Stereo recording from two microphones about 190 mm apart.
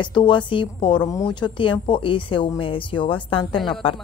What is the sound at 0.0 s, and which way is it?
Speech, 25° left (ahead or behind).